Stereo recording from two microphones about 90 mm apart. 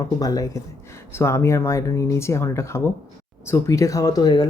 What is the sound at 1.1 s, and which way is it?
Speech, 30° left (ahead or behind).